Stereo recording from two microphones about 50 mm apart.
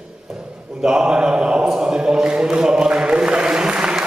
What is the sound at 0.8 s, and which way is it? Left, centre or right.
Mantra, centre.